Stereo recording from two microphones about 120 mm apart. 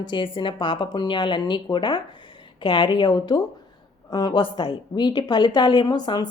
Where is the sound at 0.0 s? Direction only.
40° left (ahead or behind).